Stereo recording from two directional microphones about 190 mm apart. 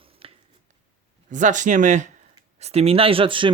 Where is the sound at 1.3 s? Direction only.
40° right (ahead or behind).